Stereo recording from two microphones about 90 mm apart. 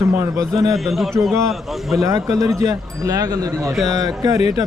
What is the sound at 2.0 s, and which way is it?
Speech, 40° right (ahead or behind).